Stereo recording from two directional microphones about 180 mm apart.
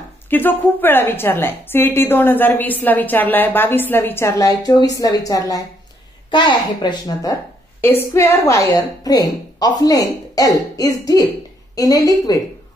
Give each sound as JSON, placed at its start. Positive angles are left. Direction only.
{"t": 0.3, "sound": "a woman's voice", "side_deg": 10}